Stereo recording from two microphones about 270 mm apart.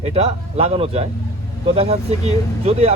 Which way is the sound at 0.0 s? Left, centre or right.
Right.